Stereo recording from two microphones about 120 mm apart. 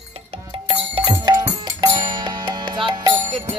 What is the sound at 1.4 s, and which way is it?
Music, 40° right (ahead or behind).